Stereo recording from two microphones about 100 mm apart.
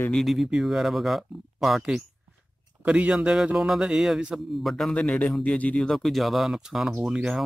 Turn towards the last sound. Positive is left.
turn(degrees=-5)  # may be behind; listen again after turning